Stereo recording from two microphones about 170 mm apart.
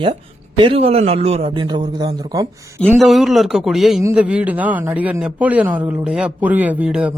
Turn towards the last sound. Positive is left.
turn(degrees=-5)  # may be behind; listen again after turning